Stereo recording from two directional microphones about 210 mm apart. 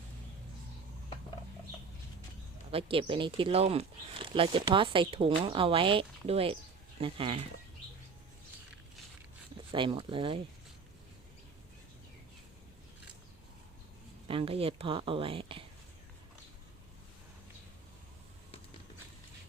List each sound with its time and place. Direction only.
2.7 s speech: 25° right (ahead or behind)
9.7 s speech: 20° right (ahead or behind)
14.3 s speech: 25° right (ahead or behind)